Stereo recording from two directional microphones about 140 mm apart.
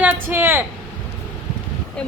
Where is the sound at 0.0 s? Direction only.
15° right (ahead or behind).